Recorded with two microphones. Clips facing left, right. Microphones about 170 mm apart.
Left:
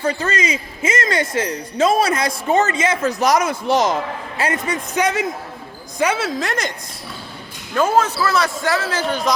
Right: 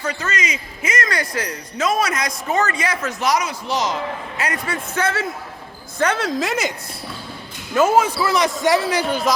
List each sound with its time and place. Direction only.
0.0 s speech: 30° left (ahead or behind); by 3.9 s 55° left (ahead or behind)
4.4 s speech: 25° left (ahead or behind); by 6.7 s centre (ahead or behind)
7.8 s speech: 10° right (ahead or behind)